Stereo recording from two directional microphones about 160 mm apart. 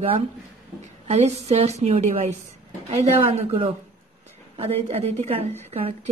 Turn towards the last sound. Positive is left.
turn(degrees=-40)  # may be behind; listen again after turning